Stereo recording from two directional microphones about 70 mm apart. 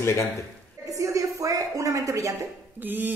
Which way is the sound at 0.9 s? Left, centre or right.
Right.